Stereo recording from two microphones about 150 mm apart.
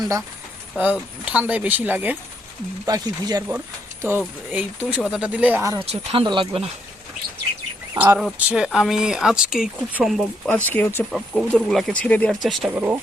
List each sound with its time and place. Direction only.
0.0 s speech: 20° right (ahead or behind)
1.2 s speech: 5° right (ahead or behind)
2.8 s speech: 25° right (ahead or behind)
4.0 s speech: 15° right (ahead or behind)
5.8 s speech: 45° right (ahead or behind)
7.9 s speech: 10° right (ahead or behind); by 11.0 s 10° left (ahead or behind)
11.1 s speech: centre (ahead or behind)
12.7 s speech: 10° right (ahead or behind)